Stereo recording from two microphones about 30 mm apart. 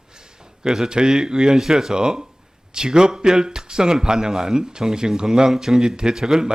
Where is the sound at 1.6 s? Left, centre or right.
Centre.